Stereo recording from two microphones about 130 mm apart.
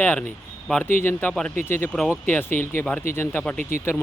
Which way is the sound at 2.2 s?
15° left (ahead or behind).